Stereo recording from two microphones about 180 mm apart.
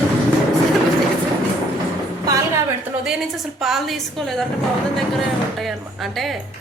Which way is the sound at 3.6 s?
Centre (ahead or behind).